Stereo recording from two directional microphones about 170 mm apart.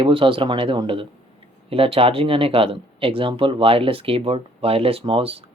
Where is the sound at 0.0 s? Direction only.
30° right (ahead or behind).